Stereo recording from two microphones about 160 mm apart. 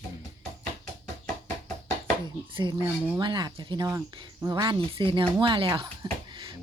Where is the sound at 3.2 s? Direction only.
25° right (ahead or behind).